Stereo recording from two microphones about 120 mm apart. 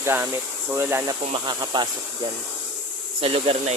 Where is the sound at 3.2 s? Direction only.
50° right (ahead or behind).